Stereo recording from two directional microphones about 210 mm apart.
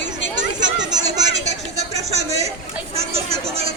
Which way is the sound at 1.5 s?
30° right (ahead or behind).